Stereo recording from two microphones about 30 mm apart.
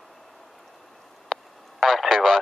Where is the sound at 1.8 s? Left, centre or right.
Centre.